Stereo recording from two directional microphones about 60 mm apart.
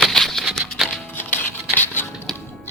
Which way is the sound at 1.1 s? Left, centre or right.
Left.